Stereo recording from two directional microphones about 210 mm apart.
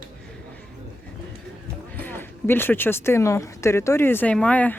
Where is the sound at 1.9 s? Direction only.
10° left (ahead or behind).